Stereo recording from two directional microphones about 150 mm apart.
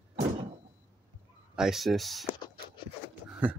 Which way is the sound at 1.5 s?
5° right (ahead or behind).